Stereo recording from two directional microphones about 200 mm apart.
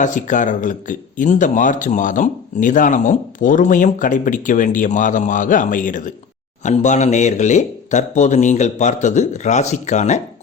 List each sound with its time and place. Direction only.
0.0 s speech: 40° left (ahead or behind)